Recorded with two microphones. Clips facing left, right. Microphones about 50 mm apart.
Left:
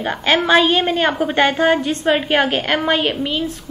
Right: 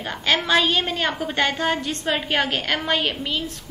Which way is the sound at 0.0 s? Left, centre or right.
Left.